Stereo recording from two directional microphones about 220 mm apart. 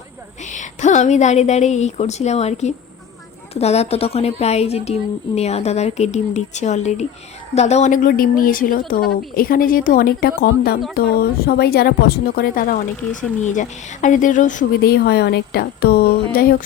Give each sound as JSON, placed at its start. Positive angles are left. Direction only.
{"t": 0.4, "sound": "a woman's voice", "side_deg": 35}